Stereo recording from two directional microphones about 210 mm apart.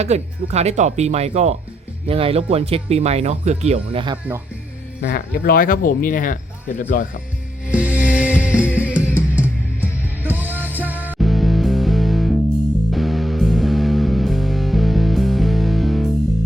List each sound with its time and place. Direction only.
0.0 s speech: 30° right (ahead or behind)
5.0 s speech: 45° left (ahead or behind)
7.7 s music: 5° right (ahead or behind)